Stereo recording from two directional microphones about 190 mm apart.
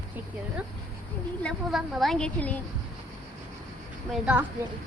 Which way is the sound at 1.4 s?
Centre (ahead or behind).